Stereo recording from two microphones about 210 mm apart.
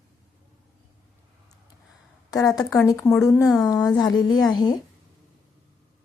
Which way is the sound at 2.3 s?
15° left (ahead or behind).